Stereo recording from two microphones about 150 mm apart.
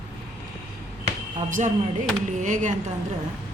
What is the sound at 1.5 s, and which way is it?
Speech, 55° right (ahead or behind).